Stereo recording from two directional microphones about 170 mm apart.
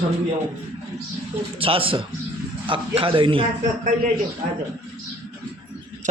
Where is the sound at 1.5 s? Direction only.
30° right (ahead or behind).